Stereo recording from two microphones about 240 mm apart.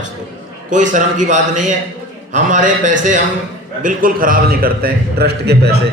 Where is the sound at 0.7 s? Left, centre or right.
Right.